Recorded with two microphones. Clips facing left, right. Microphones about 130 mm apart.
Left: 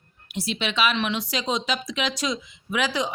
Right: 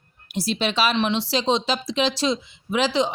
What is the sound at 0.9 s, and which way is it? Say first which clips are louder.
Speech: right 4 dB; 25° right (ahead or behind).